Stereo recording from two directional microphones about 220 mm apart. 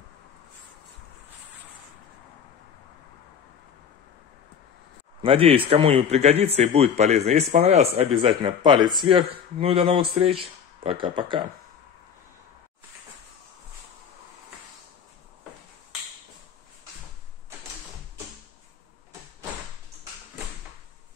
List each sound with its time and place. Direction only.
5.2 s a man's voice: 25° right (ahead or behind)